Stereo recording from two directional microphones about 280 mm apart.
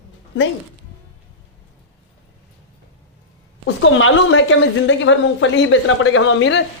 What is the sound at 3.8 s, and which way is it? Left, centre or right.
Speech, left.